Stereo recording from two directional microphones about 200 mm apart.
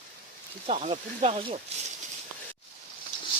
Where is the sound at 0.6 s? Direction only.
35° right (ahead or behind).